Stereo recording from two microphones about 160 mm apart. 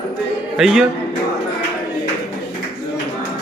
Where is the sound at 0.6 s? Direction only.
5° right (ahead or behind).